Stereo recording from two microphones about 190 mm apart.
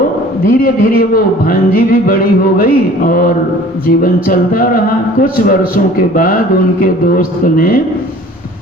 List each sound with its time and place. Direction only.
0.4 s a man's voice: 50° left (ahead or behind)